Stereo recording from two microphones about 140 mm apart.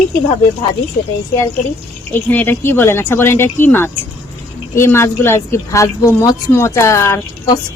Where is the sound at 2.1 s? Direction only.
15° left (ahead or behind).